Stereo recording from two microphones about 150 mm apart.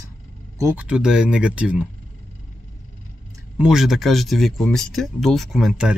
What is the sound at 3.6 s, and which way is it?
Speech, 5° right (ahead or behind).